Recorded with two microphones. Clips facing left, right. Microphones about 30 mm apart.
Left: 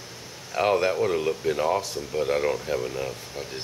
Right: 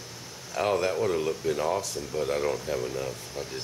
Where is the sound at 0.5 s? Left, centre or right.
Centre.